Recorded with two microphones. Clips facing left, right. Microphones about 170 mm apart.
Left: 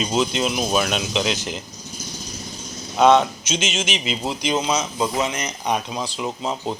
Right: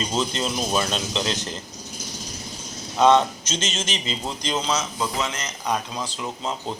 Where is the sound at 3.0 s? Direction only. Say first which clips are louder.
Left 2 dB; 15° left (ahead or behind).